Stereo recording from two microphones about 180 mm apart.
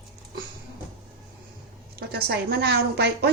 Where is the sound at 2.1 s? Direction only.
60° right (ahead or behind).